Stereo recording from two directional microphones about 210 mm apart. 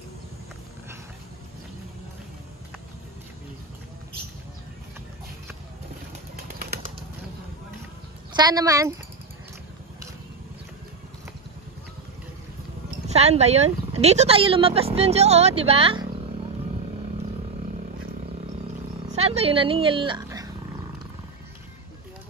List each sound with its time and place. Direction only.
6.6 s bird flight: 45° right (ahead or behind)
8.4 s speech: 20° right (ahead or behind)
13.1 s speech: 30° right (ahead or behind)
19.0 s speech: 30° right (ahead or behind)